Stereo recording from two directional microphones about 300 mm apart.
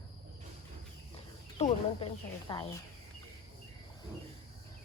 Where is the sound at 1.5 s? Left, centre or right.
Centre.